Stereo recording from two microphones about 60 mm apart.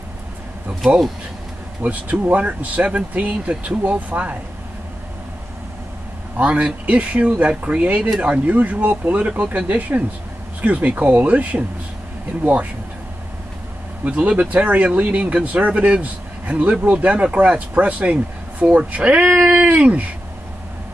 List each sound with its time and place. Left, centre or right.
1.8 s speech: right
6.3 s speech: right
14.0 s speech: right
19.4 s a sound: centre
19.7 s speech: right